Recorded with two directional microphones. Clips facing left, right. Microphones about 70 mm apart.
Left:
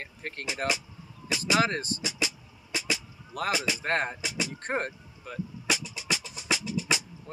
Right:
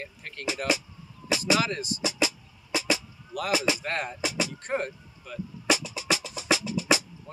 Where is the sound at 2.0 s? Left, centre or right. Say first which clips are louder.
Right 5 dB; right.